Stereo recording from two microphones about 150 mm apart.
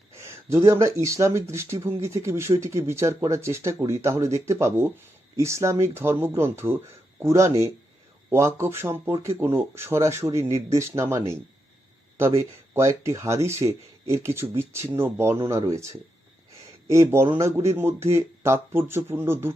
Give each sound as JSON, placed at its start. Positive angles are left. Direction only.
{"t": 0.1, "sound": "speech", "side_deg": -20}
{"t": 12.4, "sound": "speech", "side_deg": -20}
{"t": 16.9, "sound": "speech", "side_deg": -20}